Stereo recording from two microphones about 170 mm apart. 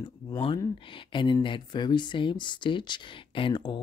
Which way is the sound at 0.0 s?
30° left (ahead or behind).